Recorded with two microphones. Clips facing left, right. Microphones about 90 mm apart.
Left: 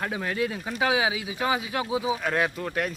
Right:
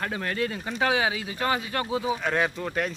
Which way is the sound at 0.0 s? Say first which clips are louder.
Left 1 dB; 5° left (ahead or behind).